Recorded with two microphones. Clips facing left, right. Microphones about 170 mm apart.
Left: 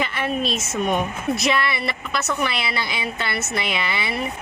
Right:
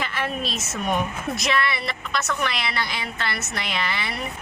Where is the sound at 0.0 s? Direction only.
Centre (ahead or behind).